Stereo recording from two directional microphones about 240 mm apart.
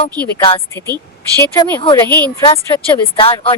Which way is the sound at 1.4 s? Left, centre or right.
Centre.